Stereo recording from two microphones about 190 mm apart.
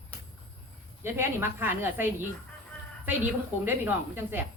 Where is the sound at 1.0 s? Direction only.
15° right (ahead or behind).